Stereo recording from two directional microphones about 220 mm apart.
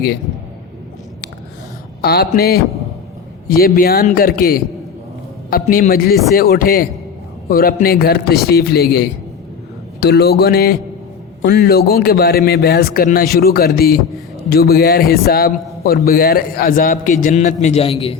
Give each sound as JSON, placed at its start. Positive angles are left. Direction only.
{"t": 2.0, "sound": "a man's voice", "side_deg": 45}
{"t": 3.6, "sound": "a man's voice", "side_deg": 45}